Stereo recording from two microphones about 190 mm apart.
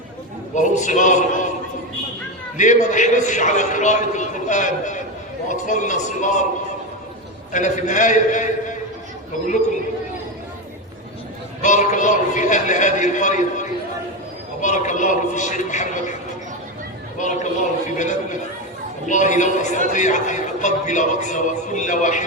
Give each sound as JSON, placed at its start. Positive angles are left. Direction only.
{"t": 0.5, "sound": "a man's voice", "side_deg": 40}
{"t": 2.6, "sound": "a man's voice", "side_deg": 40}
{"t": 7.5, "sound": "a man's voice", "side_deg": 40}
{"t": 11.6, "sound": "a man's voice", "side_deg": 40}
{"t": 17.2, "sound": "a man's voice", "side_deg": 40}